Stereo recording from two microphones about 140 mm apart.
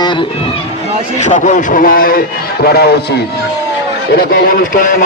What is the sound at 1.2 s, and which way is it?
A man's voice, 60° left (ahead or behind).